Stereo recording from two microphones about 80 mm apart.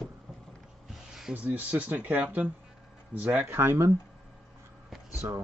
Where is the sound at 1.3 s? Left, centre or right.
Right.